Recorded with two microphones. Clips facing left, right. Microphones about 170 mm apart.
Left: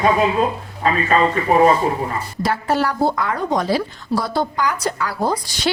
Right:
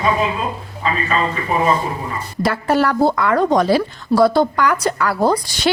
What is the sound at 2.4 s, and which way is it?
A woman's voice, 60° right (ahead or behind).